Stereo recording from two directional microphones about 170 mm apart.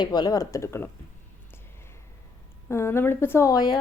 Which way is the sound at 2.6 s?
15° left (ahead or behind).